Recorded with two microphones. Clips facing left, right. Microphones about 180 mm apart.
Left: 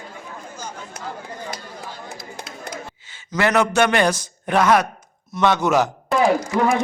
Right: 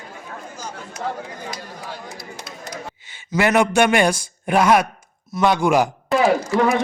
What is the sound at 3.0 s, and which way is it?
A man's voice, 15° right (ahead or behind).